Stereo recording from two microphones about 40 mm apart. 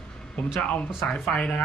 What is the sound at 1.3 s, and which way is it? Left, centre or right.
Speech, left.